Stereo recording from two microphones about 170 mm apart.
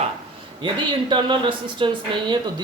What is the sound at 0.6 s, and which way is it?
Speech, 25° right (ahead or behind).